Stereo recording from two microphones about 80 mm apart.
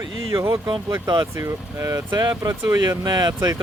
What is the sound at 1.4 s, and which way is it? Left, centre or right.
Speech, right.